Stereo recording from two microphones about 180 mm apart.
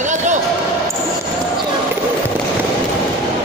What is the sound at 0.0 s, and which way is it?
Basketball bounce, 40° right (ahead or behind).